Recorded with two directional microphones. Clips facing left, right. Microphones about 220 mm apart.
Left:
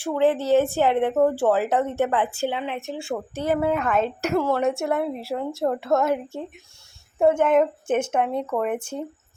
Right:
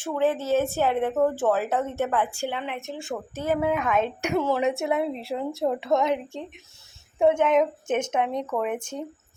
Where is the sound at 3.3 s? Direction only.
Centre (ahead or behind).